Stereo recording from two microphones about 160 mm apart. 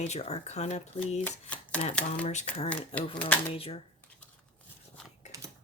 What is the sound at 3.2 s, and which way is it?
Speech, 10° left (ahead or behind).